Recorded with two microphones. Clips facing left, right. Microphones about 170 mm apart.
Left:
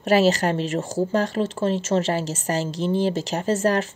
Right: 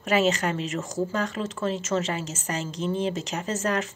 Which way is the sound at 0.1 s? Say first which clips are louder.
Left 5 dB; 35° left (ahead or behind).